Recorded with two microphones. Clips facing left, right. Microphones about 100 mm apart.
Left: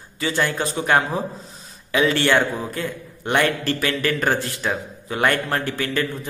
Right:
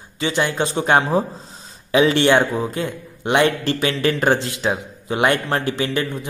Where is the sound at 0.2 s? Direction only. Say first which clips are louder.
Right 2 dB; 20° right (ahead or behind).